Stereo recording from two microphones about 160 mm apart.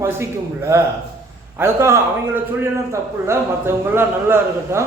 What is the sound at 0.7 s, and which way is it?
A man's voice, 15° right (ahead or behind).